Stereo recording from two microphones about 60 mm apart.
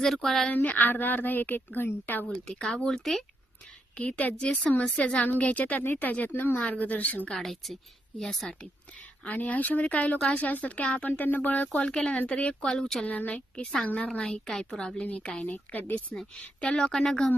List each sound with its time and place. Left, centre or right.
0.0 s speech: centre
0.5 s a woman's voice: left
2.6 s a woman's voice: centre
3.9 s a woman's voice: left
4.4 s a woman's voice: centre
7.3 s speech: centre
9.2 s a woman's voice: left
11.9 s a woman's voice: centre
12.6 s a woman's voice: centre
14.1 s a woman's voice: centre
15.0 s a woman's voice: left
15.4 s a woman's voice: left
16.6 s a woman's voice: centre